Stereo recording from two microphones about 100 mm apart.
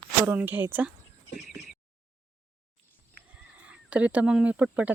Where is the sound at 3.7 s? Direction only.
15° right (ahead or behind).